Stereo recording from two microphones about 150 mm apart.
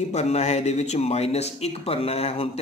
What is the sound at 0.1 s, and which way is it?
Speech, 45° left (ahead or behind).